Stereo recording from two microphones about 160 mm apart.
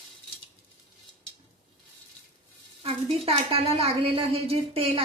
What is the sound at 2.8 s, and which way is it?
A woman's voice, 40° right (ahead or behind).